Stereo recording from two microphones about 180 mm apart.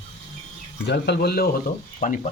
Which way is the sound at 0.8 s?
70° left (ahead or behind).